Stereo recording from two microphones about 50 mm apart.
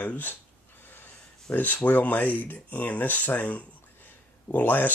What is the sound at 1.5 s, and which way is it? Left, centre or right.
Speech, left.